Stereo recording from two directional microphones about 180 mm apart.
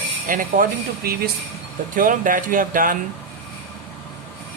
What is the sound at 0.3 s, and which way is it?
Speech, 50° right (ahead or behind).